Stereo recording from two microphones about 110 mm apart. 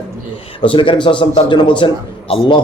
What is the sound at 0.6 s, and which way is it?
A man's voice, 50° left (ahead or behind).